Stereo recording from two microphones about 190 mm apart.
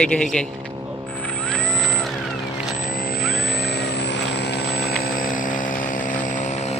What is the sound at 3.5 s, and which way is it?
Vehicle, 60° left (ahead or behind).